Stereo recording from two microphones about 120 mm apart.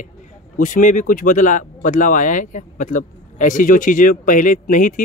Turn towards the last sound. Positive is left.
turn(degrees=90)